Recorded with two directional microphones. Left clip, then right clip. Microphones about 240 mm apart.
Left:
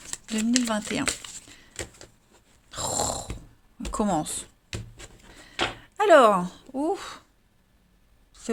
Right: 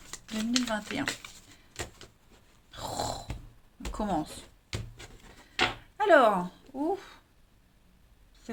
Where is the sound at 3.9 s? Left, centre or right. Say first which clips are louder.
Left 6 dB; left.